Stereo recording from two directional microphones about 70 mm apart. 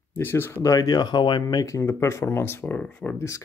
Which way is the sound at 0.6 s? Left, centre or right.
Left.